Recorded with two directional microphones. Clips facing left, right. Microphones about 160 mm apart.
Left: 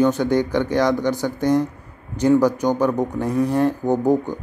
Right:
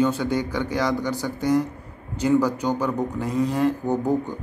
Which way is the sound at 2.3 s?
15° left (ahead or behind).